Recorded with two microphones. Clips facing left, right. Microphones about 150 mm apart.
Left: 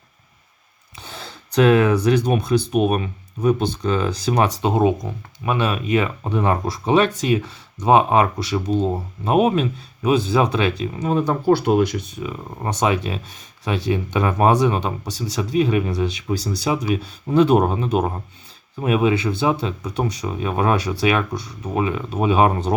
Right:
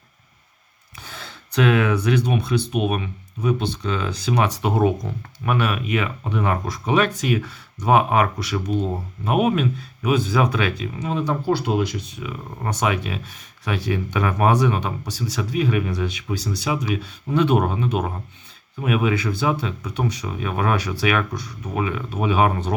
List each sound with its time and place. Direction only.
0.9 s speech: 30° left (ahead or behind)
4.6 s speech: 20° left (ahead or behind)
11.1 s speech: 45° left (ahead or behind)
12.6 s speech: 30° left (ahead or behind)